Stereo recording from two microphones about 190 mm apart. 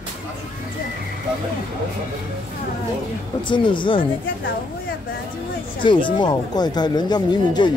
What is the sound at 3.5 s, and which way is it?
Speech, 25° left (ahead or behind).